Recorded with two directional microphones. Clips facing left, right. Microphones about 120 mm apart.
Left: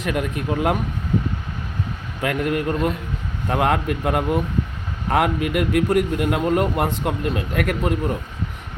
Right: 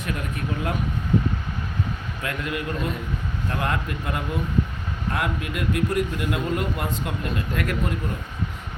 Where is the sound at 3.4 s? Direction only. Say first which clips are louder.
Left 8 dB; 70° left (ahead or behind).